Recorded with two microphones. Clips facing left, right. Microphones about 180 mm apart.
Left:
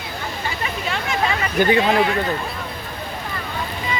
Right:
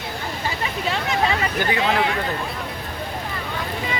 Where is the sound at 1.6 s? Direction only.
20° left (ahead or behind).